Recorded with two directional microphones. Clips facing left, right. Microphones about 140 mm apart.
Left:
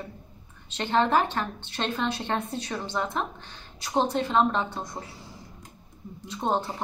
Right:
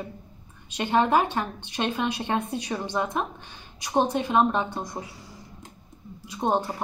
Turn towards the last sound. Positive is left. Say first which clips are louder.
# right 2 dB
turn(degrees=-15)  # may be behind; listen again after turning